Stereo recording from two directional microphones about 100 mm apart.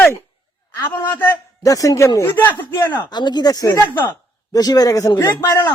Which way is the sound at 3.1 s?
45° left (ahead or behind).